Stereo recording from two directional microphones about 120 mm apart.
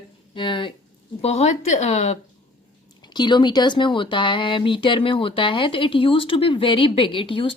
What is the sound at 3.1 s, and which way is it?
Speech, 40° left (ahead or behind).